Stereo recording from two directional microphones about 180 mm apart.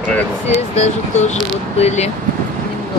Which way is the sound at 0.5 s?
40° left (ahead or behind).